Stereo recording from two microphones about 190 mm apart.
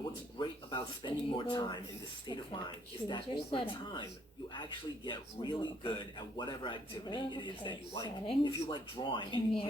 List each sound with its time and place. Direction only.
0.3 s a man's voice: 25° left (ahead or behind)
5.0 s a man's voice: 25° left (ahead or behind)